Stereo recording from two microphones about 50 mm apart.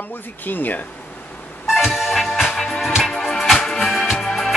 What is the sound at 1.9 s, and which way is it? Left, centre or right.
Music, centre.